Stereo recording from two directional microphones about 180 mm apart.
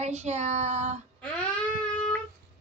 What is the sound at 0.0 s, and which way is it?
Speech, 40° right (ahead or behind).